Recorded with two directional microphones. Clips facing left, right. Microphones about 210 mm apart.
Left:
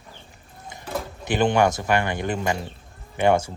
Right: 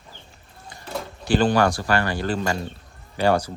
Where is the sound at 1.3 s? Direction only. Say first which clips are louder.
Right 1 dB; 20° left (ahead or behind).